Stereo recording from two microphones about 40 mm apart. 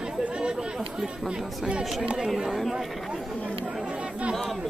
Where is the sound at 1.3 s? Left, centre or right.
Right.